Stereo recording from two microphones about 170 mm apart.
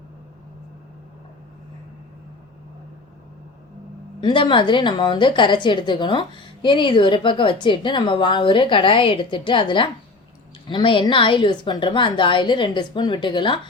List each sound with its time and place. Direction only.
4.2 s a woman's voice: 25° left (ahead or behind)